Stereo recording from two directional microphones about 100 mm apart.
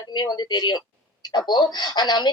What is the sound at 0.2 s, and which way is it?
Speech, 45° left (ahead or behind).